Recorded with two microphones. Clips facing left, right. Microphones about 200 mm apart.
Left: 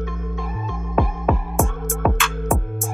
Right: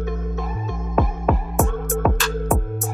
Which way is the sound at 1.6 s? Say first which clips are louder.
Right 5 dB; 15° right (ahead or behind).